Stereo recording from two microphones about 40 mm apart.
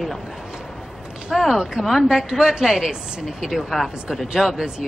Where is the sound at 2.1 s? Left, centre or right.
Centre.